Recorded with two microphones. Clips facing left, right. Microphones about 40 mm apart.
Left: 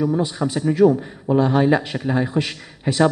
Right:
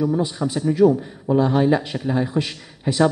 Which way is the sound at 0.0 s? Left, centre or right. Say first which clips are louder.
Left 1 dB; centre.